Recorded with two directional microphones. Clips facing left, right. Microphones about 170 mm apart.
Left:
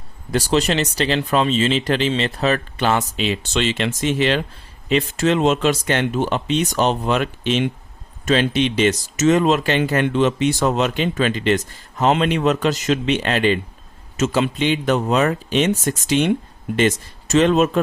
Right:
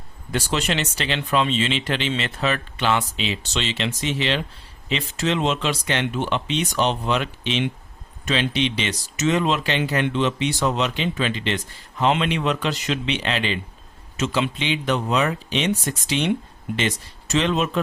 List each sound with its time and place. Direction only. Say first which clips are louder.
0.3 s speech: left 6 dB; 35° left (ahead or behind)